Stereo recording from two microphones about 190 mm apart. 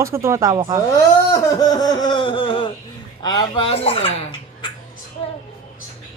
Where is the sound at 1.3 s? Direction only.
20° left (ahead or behind).